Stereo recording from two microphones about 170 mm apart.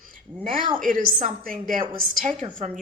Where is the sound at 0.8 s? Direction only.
55° right (ahead or behind).